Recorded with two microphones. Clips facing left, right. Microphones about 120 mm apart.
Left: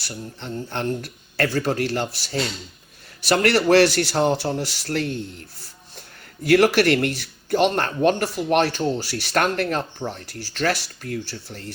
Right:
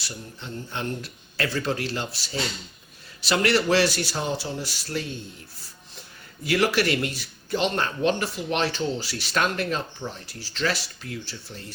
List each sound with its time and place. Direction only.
0.3 s speech: 60° left (ahead or behind)